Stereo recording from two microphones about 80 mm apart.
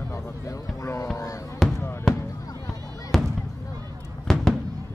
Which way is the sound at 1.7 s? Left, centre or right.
Left.